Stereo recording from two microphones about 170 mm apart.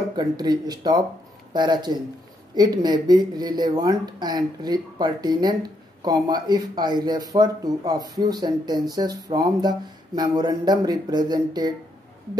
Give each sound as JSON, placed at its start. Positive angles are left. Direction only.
{"t": 0.1, "sound": "speech", "side_deg": -25}